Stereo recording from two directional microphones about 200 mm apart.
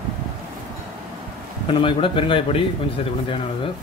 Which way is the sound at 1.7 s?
25° left (ahead or behind).